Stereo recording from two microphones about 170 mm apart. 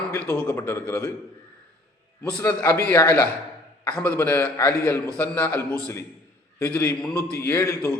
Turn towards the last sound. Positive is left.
turn(degrees=15)  # may be behind; listen again after turning